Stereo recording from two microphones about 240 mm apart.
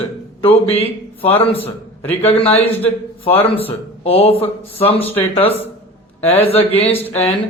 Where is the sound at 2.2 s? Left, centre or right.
Left.